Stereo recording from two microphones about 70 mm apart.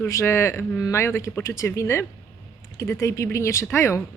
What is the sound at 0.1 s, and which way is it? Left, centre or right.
Speech, left.